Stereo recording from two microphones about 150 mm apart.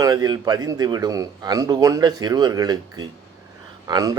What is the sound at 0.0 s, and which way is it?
A man's voice, 25° right (ahead or behind).